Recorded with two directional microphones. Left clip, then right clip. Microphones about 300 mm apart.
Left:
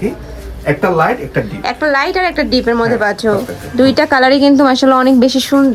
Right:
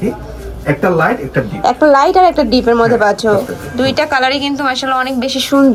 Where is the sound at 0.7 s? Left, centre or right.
Centre.